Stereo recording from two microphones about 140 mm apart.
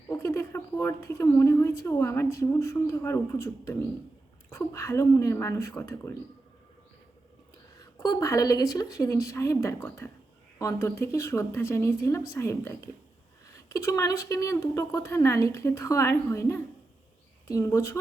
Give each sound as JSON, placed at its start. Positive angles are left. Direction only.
{"t": 0.1, "sound": "speech", "side_deg": 20}
{"t": 7.8, "sound": "speech", "side_deg": 25}